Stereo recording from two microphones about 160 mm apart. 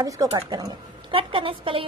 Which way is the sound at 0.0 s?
25° right (ahead or behind).